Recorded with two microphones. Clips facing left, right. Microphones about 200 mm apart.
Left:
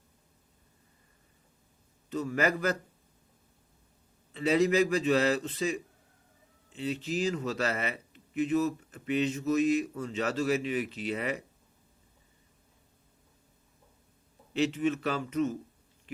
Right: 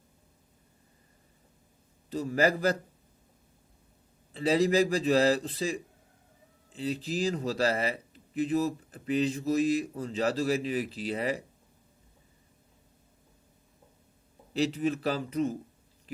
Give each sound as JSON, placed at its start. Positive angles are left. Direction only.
{"t": 2.0, "sound": "a man's voice", "side_deg": -35}
{"t": 4.3, "sound": "a man's voice", "side_deg": -35}
{"t": 14.5, "sound": "a man's voice", "side_deg": -35}
{"t": 16.1, "sound": "chewing", "side_deg": -35}